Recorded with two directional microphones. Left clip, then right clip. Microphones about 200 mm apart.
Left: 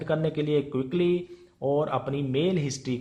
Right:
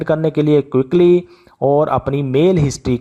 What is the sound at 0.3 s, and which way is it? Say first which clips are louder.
Speech: right 12 dB; 45° right (ahead or behind).